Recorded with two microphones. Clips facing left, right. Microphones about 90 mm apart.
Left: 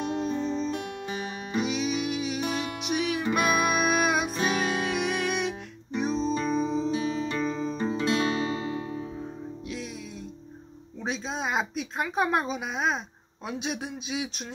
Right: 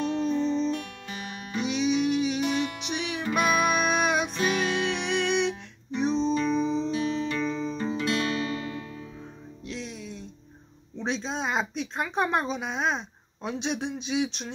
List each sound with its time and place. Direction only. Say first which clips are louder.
0.0 s music: right 3 dB; 10° left (ahead or behind)
8.0 s music: left 2 dB; 30° left (ahead or behind)
11.0 s speech: right 2 dB; 5° left (ahead or behind)